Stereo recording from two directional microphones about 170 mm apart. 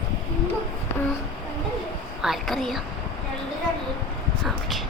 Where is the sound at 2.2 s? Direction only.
Centre (ahead or behind).